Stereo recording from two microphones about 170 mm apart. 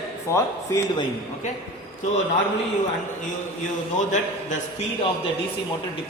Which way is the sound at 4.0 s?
45° left (ahead or behind).